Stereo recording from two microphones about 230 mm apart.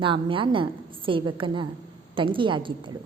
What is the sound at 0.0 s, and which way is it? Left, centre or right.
A woman's voice, right.